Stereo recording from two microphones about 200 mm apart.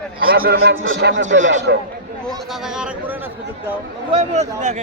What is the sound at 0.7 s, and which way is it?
Speech, 75° right (ahead or behind).